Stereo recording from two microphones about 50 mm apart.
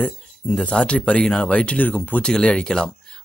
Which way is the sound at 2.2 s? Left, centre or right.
Centre.